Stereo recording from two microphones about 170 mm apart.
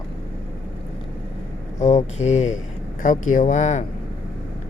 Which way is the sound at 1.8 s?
45° left (ahead or behind).